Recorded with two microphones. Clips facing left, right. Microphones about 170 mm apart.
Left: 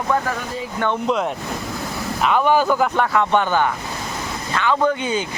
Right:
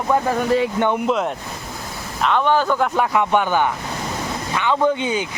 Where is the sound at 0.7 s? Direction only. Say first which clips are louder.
Right 3 dB; 20° right (ahead or behind).